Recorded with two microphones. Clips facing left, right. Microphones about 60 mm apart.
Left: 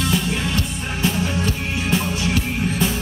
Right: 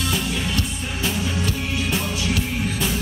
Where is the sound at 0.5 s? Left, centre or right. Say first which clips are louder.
Left 2 dB; left.